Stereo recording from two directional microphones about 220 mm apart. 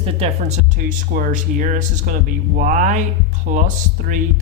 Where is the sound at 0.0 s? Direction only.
25° right (ahead or behind).